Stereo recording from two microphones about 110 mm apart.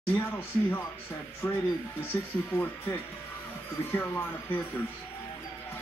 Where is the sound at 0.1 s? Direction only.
20° left (ahead or behind).